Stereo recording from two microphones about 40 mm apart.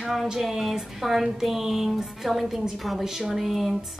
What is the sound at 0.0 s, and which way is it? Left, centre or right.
Music, centre.